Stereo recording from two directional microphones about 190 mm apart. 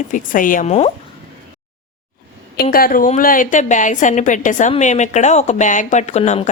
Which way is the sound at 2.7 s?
50° left (ahead or behind).